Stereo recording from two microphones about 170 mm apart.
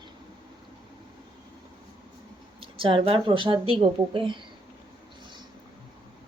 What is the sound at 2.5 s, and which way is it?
Speech, 30° right (ahead or behind).